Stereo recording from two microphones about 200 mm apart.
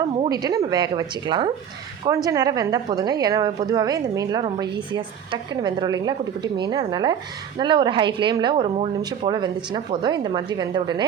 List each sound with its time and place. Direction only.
0.3 s a woman's voice: 20° right (ahead or behind)